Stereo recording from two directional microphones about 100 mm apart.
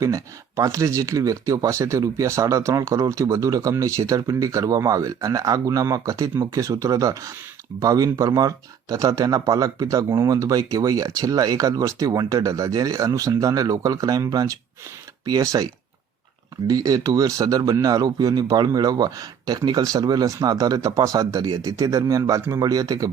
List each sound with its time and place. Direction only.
0.0 s speech: 30° right (ahead or behind)